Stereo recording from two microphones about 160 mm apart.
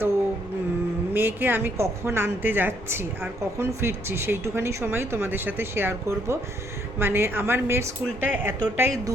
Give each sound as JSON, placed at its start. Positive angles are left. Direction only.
{"t": 1.1, "sound": "speech", "side_deg": -15}